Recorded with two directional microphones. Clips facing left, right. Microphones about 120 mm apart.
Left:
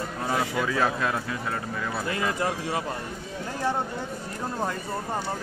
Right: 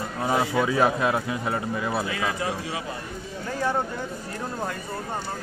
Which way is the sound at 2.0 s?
50° left (ahead or behind).